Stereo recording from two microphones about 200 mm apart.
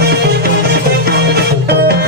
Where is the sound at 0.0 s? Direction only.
55° right (ahead or behind).